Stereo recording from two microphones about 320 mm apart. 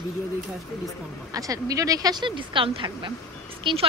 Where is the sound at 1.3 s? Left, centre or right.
Centre.